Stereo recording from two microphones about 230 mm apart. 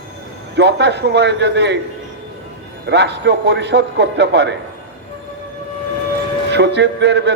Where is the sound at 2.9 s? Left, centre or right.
Right.